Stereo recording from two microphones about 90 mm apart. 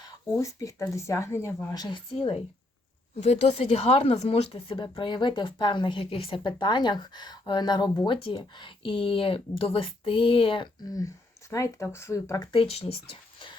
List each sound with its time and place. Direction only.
0.3 s speech: 35° left (ahead or behind)
1.7 s a woman's voice: 50° left (ahead or behind)
2.1 s speech: 90° left
3.5 s a woman's voice: 90° left
10.8 s speech: 40° left (ahead or behind)
12.5 s speech: 90° left; by 13.6 s 70° left (ahead or behind)